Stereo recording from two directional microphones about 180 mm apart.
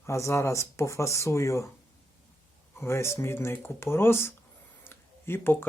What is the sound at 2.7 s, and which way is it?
Speech, 15° left (ahead or behind).